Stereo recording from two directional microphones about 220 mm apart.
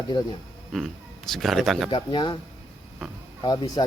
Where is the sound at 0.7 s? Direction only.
Centre (ahead or behind).